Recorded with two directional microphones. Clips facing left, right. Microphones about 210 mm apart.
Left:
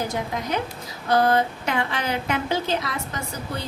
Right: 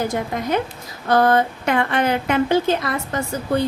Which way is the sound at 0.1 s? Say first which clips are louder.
Right 5 dB; 55° right (ahead or behind).